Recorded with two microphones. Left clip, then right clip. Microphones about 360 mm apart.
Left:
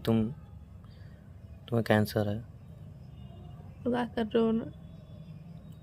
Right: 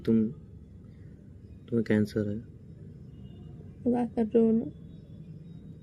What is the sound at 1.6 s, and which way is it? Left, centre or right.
Speech, left.